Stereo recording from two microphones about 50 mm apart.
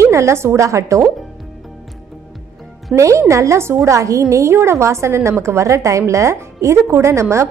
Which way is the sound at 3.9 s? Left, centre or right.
Right.